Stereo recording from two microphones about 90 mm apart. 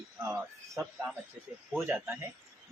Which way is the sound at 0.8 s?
10° right (ahead or behind).